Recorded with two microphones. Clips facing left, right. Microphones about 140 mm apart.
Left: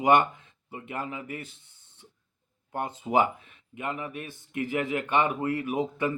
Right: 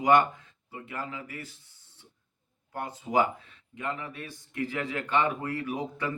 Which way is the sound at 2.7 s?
20° left (ahead or behind).